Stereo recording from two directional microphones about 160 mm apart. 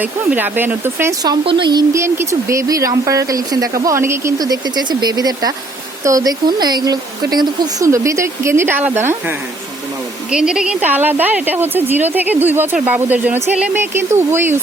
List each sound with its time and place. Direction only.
0.0 s a woman's voice: 10° right (ahead or behind)
1.2 s speech: 30° right (ahead or behind)
10.3 s a woman's voice: 5° right (ahead or behind)